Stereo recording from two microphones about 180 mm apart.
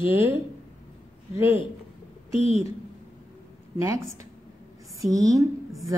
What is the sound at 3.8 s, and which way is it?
A woman's voice, 15° right (ahead or behind).